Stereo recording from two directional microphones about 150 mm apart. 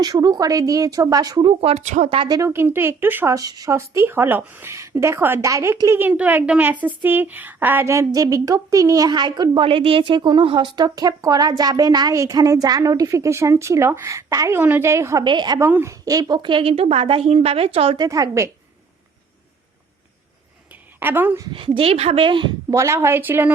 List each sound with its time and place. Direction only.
0.0 s speech: 25° right (ahead or behind)
1.5 s speech: 45° right (ahead or behind); by 15.2 s 20° right (ahead or behind)
15.2 s speech: 30° right (ahead or behind)
15.6 s a woman's voice: 15° right (ahead or behind)
21.0 s a woman's voice: 15° right (ahead or behind)
21.4 s a woman's voice: 35° right (ahead or behind)
22.7 s a woman's voice: 20° right (ahead or behind)